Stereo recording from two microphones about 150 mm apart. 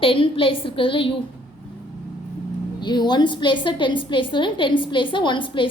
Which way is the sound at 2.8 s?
30° left (ahead or behind).